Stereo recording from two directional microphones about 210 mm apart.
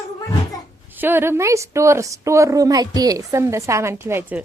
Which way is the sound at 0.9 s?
10° right (ahead or behind).